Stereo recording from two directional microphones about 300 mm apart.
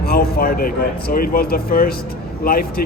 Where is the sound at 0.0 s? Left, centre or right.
Left.